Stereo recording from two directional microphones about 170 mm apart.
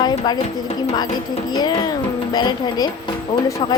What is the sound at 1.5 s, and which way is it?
Speech, 25° left (ahead or behind).